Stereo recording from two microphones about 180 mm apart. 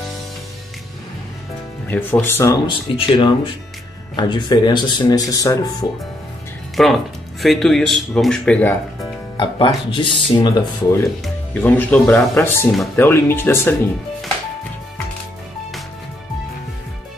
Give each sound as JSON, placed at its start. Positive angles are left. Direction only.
{"t": 1.9, "sound": "speech", "side_deg": 10}
{"t": 2.6, "sound": "speech", "side_deg": 25}
{"t": 6.8, "sound": "a man's voice", "side_deg": 0}
{"t": 9.4, "sound": "speech", "side_deg": 25}
{"t": 11.5, "sound": "speech", "side_deg": 10}